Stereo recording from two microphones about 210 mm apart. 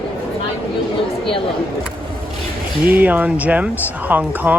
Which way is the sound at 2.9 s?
10° right (ahead or behind).